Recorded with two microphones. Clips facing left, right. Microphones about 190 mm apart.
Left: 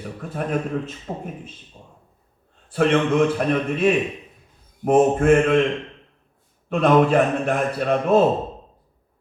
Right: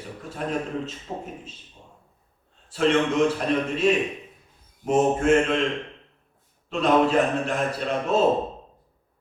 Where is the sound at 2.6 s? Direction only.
55° left (ahead or behind).